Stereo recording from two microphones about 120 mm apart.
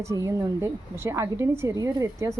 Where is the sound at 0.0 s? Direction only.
25° right (ahead or behind).